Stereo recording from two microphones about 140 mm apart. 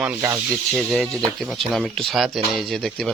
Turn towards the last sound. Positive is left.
turn(degrees=5)  # may be behind; listen again after turning